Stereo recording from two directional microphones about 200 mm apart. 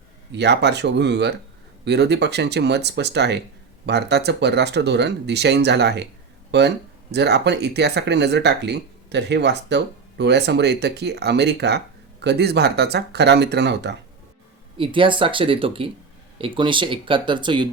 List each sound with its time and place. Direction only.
0.3 s speech: 55° right (ahead or behind)
14.8 s speech: 25° right (ahead or behind)